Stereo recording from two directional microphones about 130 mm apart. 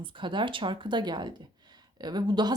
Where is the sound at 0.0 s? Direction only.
40° right (ahead or behind).